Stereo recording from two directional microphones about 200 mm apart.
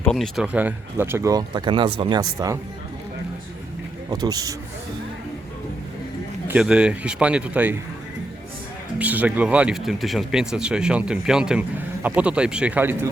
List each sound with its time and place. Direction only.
0.0 s speech: centre (ahead or behind); by 2.6 s 20° right (ahead or behind)
4.1 s speech: 20° right (ahead or behind)
6.5 s speech: 5° right (ahead or behind)
9.0 s speech: 10° right (ahead or behind)